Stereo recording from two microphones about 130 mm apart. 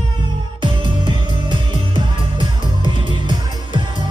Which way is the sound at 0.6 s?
40° right (ahead or behind).